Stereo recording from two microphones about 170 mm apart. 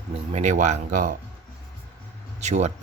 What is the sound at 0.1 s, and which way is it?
Speech, 40° right (ahead or behind).